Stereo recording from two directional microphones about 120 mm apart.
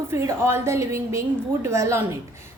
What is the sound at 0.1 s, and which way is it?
A woman's voice, 20° right (ahead or behind).